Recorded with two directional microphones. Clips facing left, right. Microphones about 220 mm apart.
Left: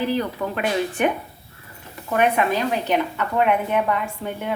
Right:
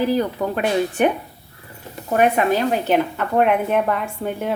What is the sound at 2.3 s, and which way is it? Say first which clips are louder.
A woman's voice: right 3 dB; 40° right (ahead or behind).